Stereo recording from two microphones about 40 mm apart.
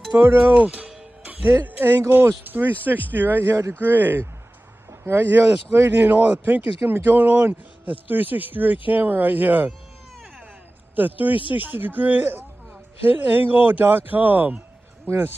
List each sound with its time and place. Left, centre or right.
0.1 s speech: right
0.6 s music: right
1.4 s speech: right
6.0 s speech: right
11.0 s speech: right